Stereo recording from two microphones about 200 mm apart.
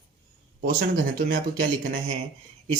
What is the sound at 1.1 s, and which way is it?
Speech, 45° right (ahead or behind).